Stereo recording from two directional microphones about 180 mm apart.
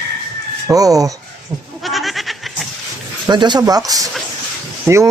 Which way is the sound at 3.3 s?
25° right (ahead or behind).